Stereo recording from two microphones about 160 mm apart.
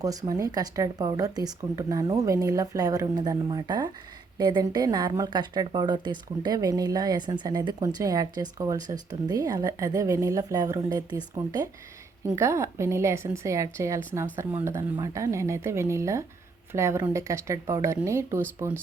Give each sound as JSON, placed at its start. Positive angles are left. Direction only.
{"t": 0.0, "sound": "a woman's voice", "side_deg": -20}
{"t": 12.4, "sound": "a woman's voice", "side_deg": -15}